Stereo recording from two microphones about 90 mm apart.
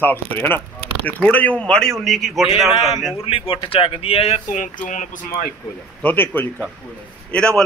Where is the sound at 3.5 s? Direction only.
75° left (ahead or behind).